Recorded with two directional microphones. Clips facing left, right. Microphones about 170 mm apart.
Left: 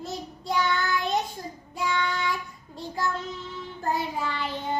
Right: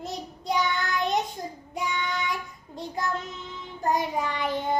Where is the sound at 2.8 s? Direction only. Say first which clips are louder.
Even; 20° right (ahead or behind).